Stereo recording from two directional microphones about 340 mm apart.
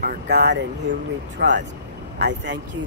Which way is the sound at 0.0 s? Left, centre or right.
Right.